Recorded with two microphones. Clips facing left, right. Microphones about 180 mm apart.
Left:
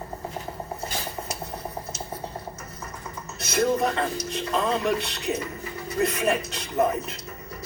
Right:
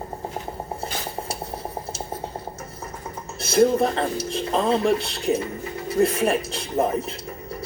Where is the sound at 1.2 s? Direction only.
30° right (ahead or behind).